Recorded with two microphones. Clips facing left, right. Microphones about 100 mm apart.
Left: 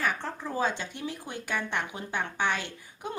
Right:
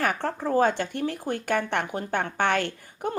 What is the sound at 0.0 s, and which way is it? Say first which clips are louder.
Speech: right 5 dB; 55° right (ahead or behind).